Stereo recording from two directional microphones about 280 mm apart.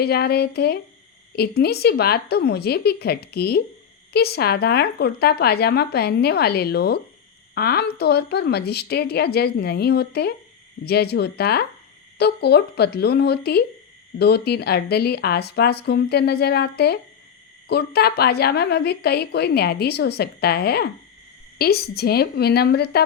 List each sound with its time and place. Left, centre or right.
0.0 s a woman's voice: left